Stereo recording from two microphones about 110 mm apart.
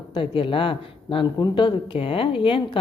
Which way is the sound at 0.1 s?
50° left (ahead or behind).